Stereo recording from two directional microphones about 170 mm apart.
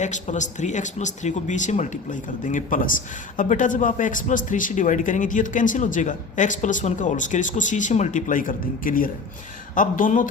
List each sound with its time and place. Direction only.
0.0 s speech: 45° left (ahead or behind)